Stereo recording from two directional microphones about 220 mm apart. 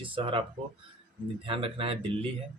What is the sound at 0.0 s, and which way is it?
Speech, 25° right (ahead or behind).